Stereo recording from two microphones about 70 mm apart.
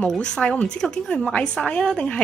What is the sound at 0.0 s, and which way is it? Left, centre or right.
A woman's voice, centre.